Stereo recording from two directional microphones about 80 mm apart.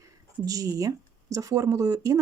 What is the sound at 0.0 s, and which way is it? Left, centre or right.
Speech, right.